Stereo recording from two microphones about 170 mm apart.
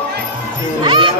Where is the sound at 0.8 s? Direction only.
30° right (ahead or behind).